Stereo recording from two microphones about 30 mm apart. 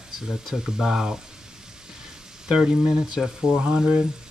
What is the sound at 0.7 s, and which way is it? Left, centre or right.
Speech, centre.